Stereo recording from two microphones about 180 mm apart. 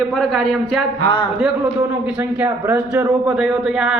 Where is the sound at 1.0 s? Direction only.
25° left (ahead or behind).